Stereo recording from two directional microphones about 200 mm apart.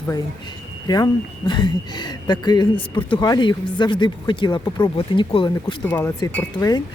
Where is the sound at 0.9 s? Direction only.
20° left (ahead or behind).